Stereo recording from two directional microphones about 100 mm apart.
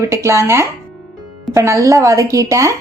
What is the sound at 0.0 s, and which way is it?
A woman's voice, 30° right (ahead or behind).